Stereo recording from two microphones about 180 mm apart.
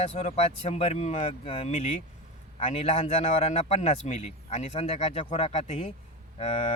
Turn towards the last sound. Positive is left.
turn(degrees=35)  # may be behind; listen again after turning